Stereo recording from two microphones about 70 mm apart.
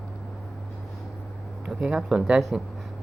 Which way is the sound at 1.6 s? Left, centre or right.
Centre.